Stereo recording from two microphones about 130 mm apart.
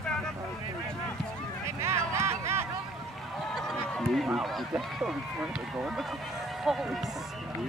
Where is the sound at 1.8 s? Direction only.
20° right (ahead or behind).